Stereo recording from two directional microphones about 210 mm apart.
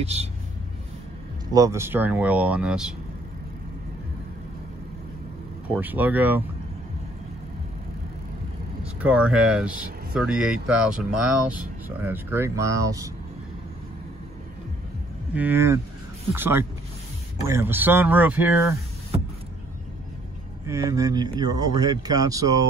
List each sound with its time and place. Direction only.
0.0 s speech: 30° right (ahead or behind)
1.5 s speech: 15° right (ahead or behind)
5.8 s speech: 10° right (ahead or behind)
9.0 s speech: 5° right (ahead or behind)
15.3 s speech: 10° right (ahead or behind)
20.6 s speech: 15° right (ahead or behind)